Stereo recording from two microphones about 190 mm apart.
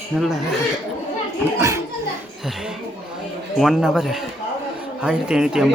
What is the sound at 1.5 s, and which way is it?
Speech, 15° right (ahead or behind).